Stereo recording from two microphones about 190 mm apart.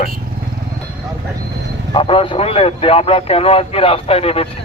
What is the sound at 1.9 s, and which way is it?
A man's voice, 25° left (ahead or behind).